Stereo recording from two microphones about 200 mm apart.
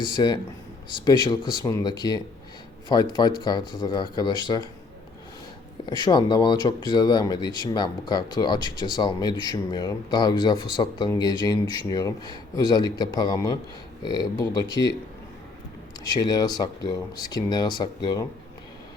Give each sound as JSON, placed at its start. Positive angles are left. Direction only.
{"t": 0.0, "sound": "speech", "side_deg": 20}
{"t": 6.0, "sound": "speech", "side_deg": 20}
{"t": 16.0, "sound": "speech", "side_deg": 20}